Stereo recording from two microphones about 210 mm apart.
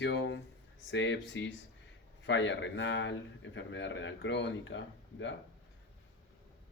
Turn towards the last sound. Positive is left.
turn(degrees=60)  # may be behind; listen again after turning